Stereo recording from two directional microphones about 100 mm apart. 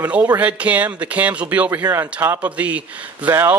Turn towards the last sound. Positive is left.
turn(degrees=-20)  # may be behind; listen again after turning